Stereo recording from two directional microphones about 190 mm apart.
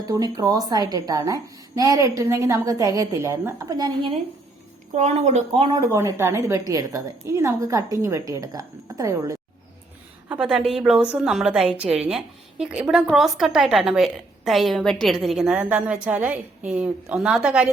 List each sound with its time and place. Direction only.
0.0 s a woman's voice: 20° right (ahead or behind)
4.9 s a woman's voice: 35° right (ahead or behind)
5.9 s a woman's voice: 15° right (ahead or behind)
10.2 s speech: 5° right (ahead or behind)